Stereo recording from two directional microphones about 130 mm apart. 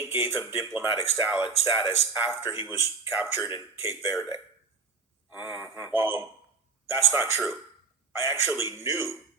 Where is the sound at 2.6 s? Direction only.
20° right (ahead or behind).